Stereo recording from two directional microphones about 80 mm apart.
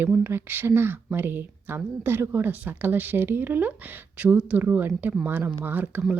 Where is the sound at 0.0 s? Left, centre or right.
Right.